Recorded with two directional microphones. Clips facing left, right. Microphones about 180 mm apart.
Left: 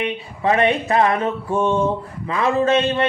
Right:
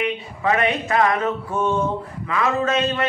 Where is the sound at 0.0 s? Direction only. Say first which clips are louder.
Left 1 dB; 30° left (ahead or behind).